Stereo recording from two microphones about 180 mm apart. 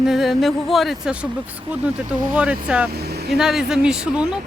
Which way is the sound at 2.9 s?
65° right (ahead or behind).